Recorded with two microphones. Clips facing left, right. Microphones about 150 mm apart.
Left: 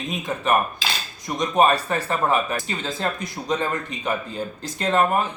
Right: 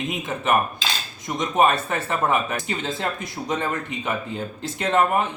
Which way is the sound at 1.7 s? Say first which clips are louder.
Left 2 dB; 20° right (ahead or behind).